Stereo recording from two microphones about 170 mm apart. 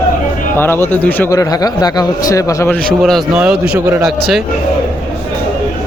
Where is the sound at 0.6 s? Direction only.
15° left (ahead or behind).